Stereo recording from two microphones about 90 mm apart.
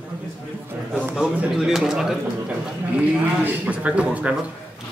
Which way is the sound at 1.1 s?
5° right (ahead or behind).